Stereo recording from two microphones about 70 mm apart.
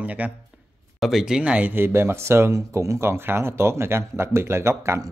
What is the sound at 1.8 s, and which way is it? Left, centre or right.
Speech, right.